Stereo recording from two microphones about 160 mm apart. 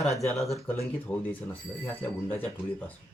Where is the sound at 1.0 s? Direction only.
15° left (ahead or behind).